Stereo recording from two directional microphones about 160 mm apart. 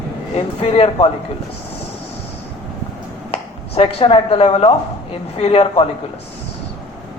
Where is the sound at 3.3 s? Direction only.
40° left (ahead or behind).